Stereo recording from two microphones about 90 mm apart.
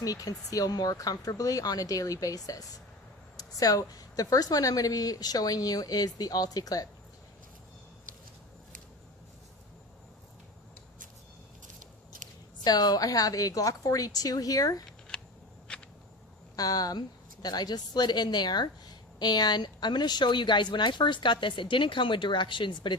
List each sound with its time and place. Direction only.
0.0 s a woman's voice: 40° left (ahead or behind)
12.6 s a woman's voice: 45° left (ahead or behind)
14.8 s a sound: 10° left (ahead or behind)
16.6 s a woman's voice: 45° left (ahead or behind); by 23.0 s 65° left (ahead or behind)